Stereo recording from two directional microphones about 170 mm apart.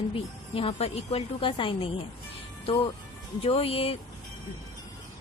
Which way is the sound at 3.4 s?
35° left (ahead or behind).